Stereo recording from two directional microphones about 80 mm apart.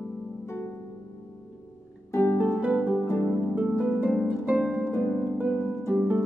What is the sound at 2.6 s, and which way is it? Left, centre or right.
Music, centre.